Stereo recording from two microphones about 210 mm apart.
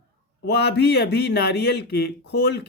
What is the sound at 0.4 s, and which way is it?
Speech, 55° left (ahead or behind).